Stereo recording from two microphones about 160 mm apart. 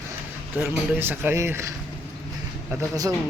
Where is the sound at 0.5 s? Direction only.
15° right (ahead or behind).